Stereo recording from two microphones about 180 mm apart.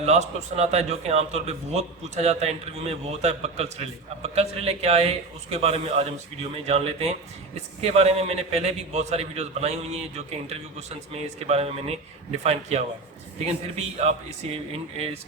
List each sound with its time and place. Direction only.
0.0 s a man's voice: 35° right (ahead or behind)